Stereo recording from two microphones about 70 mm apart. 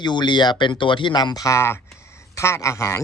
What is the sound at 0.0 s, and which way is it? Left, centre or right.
Speech, left.